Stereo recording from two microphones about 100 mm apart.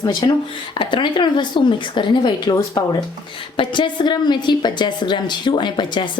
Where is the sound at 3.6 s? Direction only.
55° left (ahead or behind).